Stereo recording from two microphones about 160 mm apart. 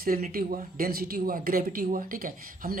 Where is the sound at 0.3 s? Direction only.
65° right (ahead or behind).